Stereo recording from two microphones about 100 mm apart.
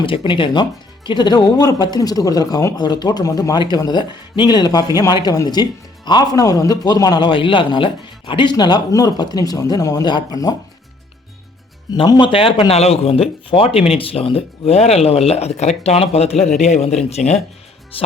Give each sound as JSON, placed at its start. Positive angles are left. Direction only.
{"t": 0.0, "sound": "a man's voice", "side_deg": 60}
{"t": 7.3, "sound": "speech", "side_deg": 60}
{"t": 12.0, "sound": "a man's voice", "side_deg": 40}
{"t": 12.3, "sound": "speech", "side_deg": 65}
{"t": 17.9, "sound": "speech", "side_deg": 65}